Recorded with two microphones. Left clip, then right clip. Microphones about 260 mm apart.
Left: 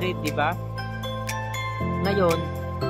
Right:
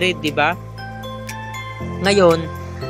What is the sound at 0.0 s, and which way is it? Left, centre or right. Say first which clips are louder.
Speech: right 8 dB; centre.